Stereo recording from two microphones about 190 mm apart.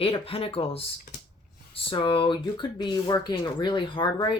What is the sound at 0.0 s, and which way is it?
Speech, 30° left (ahead or behind).